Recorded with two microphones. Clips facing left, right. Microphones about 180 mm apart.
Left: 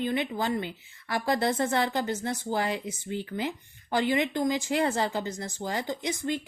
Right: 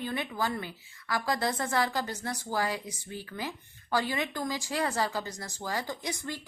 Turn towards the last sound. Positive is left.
turn(degrees=20)  # may be behind; listen again after turning